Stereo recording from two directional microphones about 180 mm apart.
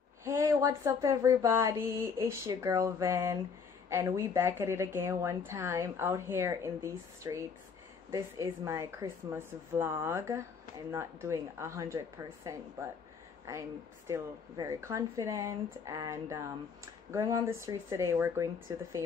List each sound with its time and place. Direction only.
0.2 s speech: 15° right (ahead or behind)